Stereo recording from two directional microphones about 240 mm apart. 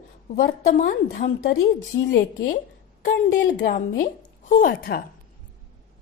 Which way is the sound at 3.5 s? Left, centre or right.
Left.